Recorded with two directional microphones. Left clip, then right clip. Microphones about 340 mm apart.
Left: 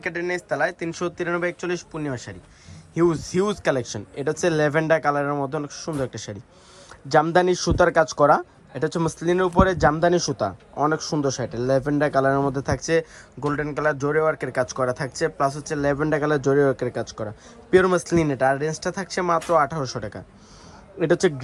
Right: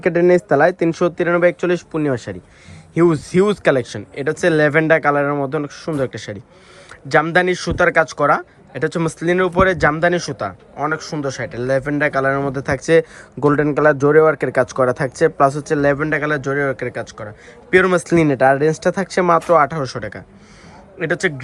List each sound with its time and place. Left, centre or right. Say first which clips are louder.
0.7 s speech: right 11 dB; centre